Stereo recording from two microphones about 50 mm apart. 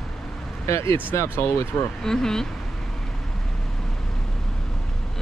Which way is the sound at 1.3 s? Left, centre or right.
Left.